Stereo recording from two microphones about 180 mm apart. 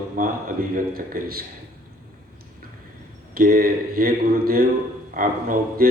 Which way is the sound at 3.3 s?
55° right (ahead or behind).